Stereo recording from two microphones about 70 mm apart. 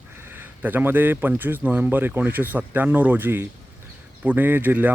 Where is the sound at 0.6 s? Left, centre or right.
Right.